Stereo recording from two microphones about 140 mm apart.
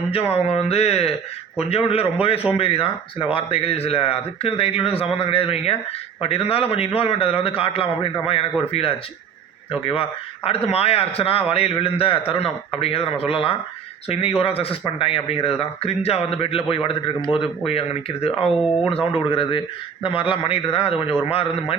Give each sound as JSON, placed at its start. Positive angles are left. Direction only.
{"t": 0.1, "sound": "a man's voice", "side_deg": 45}